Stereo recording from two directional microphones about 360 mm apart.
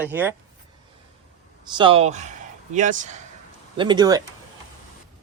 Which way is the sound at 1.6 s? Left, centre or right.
Centre.